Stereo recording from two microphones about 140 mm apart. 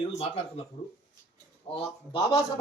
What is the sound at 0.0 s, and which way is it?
Speech, 45° left (ahead or behind).